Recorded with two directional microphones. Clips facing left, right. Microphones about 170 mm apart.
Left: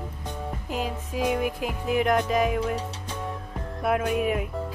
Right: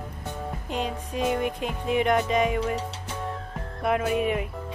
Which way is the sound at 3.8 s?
Centre (ahead or behind).